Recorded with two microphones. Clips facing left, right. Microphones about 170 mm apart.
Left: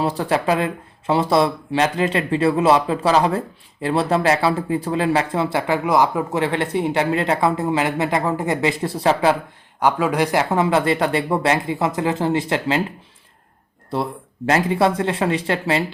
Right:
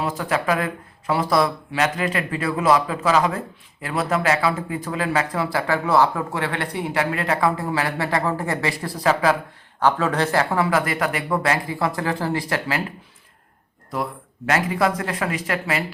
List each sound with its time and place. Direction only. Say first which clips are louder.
0.0 s speech: left 3 dB; 30° left (ahead or behind)
9.8 s speech: left 2 dB; 10° left (ahead or behind)
13.9 s speech: left 3 dB; 30° left (ahead or behind)